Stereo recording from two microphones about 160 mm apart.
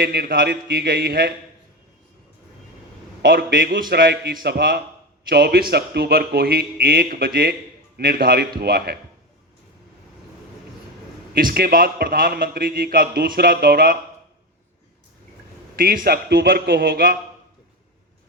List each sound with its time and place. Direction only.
0.0 s a man's voice: 75° right (ahead or behind)
3.2 s a man's voice: 70° right (ahead or behind); by 4.4 s 90° right
4.4 s a man's voice: 75° right (ahead or behind)
11.3 s a man's voice: 65° right (ahead or behind)
15.7 s a man's voice: 70° right (ahead or behind)